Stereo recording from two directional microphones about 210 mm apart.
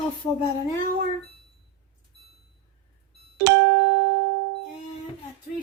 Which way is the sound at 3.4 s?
60° right (ahead or behind).